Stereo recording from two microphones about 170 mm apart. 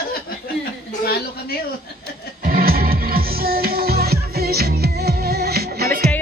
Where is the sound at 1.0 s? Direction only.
65° left (ahead or behind).